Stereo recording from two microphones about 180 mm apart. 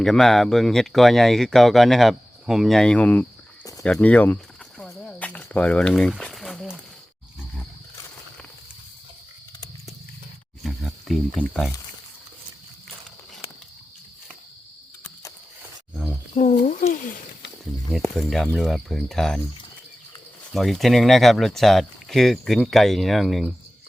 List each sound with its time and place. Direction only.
0.0 s speech: centre (ahead or behind)
3.6 s a sound: 20° left (ahead or behind)
3.8 s speech: 5° left (ahead or behind)
4.8 s a sound: 5° left (ahead or behind)
10.6 s speech: centre (ahead or behind)
16.3 s speech: 40° left (ahead or behind)
18.2 s speech: centre (ahead or behind)
20.5 s speech: centre (ahead or behind)